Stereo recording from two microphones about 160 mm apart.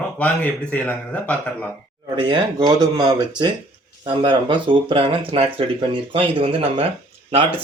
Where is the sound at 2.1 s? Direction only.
30° right (ahead or behind).